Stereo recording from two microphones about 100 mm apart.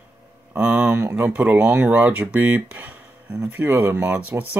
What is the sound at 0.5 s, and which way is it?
Speech, 10° right (ahead or behind).